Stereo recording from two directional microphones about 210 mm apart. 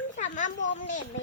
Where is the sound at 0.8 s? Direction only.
40° left (ahead or behind).